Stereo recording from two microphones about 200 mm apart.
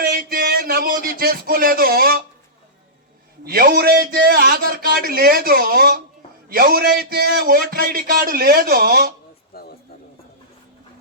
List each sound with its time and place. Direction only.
0.0 s a man's voice: 45° right (ahead or behind)
3.4 s a man's voice: 50° right (ahead or behind)
9.5 s a sound: 50° left (ahead or behind)